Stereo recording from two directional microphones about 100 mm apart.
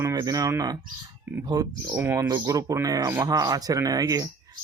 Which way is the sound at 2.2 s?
35° right (ahead or behind).